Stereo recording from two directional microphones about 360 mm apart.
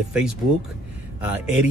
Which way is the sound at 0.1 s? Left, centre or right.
Centre.